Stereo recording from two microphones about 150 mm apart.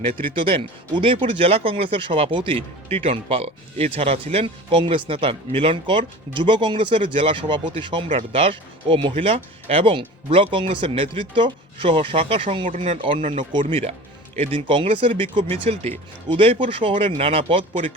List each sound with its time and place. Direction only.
0.3 s speech: 35° right (ahead or behind)
12.6 s speech: 55° right (ahead or behind)
13.0 s speech: 35° right (ahead or behind)